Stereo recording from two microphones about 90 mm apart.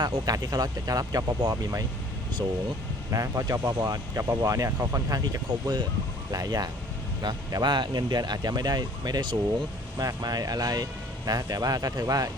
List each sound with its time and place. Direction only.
0.0 s speech: 45° right (ahead or behind)
2.4 s speech: 55° right (ahead or behind)
3.1 s speech: 40° right (ahead or behind)